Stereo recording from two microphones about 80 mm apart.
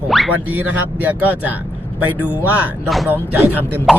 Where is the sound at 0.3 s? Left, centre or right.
Right.